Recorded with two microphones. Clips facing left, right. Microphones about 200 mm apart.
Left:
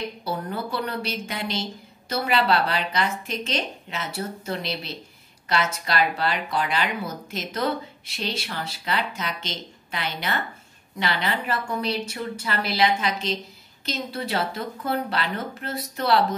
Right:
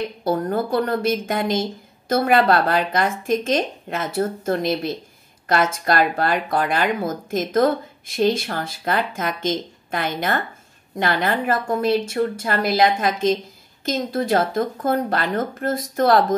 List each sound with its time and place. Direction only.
0.2 s speech: 50° right (ahead or behind)